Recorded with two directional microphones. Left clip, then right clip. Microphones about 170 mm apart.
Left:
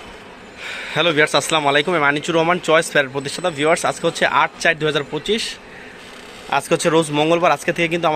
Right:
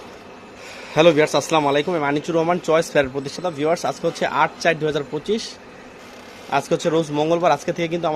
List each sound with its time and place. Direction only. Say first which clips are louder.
0.7 s speech: right 3 dB; 10° right (ahead or behind)
6.5 s speech: left 3 dB; centre (ahead or behind)